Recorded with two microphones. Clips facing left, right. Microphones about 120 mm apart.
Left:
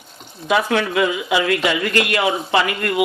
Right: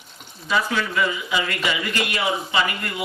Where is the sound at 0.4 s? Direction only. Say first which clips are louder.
Left 5 dB; 65° left (ahead or behind).